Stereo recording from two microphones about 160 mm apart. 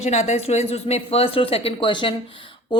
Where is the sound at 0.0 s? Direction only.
45° left (ahead or behind).